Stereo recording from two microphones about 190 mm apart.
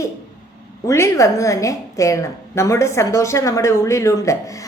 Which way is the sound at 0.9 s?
15° left (ahead or behind).